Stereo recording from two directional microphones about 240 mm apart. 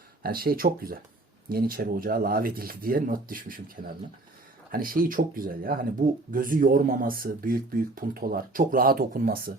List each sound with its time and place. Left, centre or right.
0.2 s speech: right